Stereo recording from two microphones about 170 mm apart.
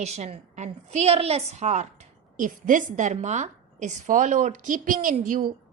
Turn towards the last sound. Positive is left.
turn(degrees=-50)  # may be behind; listen again after turning